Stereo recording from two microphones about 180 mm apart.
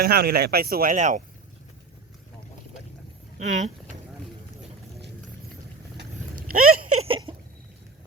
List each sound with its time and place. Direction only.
0.0 s speech: 60° right (ahead or behind)
3.3 s speech: 40° right (ahead or behind)
6.3 s a sound: 50° right (ahead or behind)